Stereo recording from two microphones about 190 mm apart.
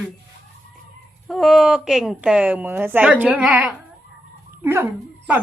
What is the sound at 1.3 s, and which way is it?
A woman's voice, centre (ahead or behind).